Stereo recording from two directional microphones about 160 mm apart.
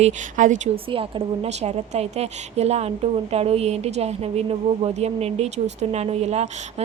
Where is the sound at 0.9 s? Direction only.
35° right (ahead or behind).